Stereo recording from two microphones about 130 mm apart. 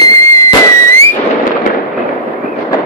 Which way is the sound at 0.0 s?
25° left (ahead or behind).